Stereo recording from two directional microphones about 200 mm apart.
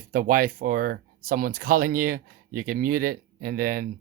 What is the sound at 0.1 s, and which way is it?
Speech, 45° right (ahead or behind).